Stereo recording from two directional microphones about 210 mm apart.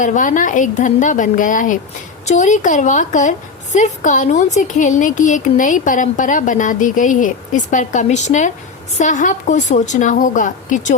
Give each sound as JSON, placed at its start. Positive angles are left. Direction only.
{"t": 0.0, "sound": "a woman's voice", "side_deg": 40}